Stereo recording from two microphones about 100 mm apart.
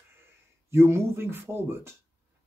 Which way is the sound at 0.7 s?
25° right (ahead or behind).